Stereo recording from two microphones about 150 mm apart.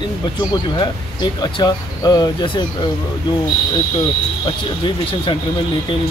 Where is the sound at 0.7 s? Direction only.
30° left (ahead or behind).